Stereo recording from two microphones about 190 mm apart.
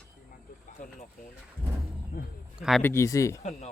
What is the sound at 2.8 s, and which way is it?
Speech, 15° left (ahead or behind).